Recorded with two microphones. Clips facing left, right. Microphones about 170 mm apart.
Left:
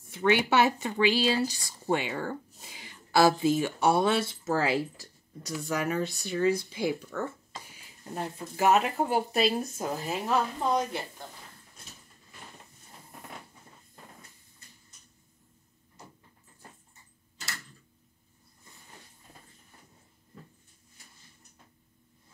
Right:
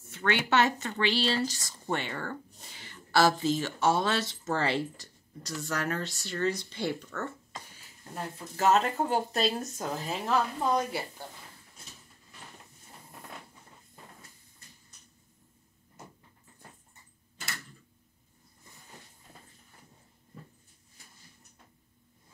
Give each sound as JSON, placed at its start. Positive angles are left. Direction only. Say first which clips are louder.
{"t": 0.1, "sound": "speech", "louder": "left 3 dB", "side_deg": 15}
{"t": 10.9, "sound": "a woman's voice", "louder": "right 1 dB", "side_deg": -5}